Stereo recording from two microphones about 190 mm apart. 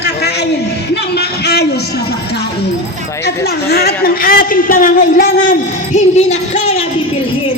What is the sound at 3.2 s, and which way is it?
A woman's voice, 55° left (ahead or behind).